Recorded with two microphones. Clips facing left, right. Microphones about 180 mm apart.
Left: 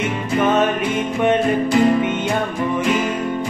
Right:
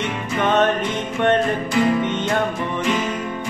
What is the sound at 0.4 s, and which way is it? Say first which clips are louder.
Music: left 1 dB; 10° left (ahead or behind).